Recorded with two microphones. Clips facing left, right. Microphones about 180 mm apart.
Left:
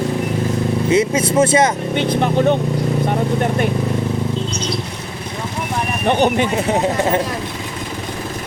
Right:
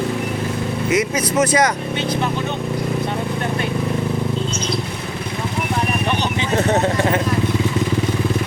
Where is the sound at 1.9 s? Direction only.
55° left (ahead or behind).